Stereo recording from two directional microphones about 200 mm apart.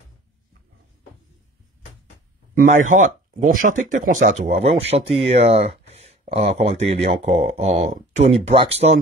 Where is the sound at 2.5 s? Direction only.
40° right (ahead or behind).